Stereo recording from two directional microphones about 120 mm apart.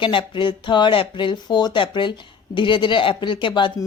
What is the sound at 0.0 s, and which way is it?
A woman's voice, 45° left (ahead or behind).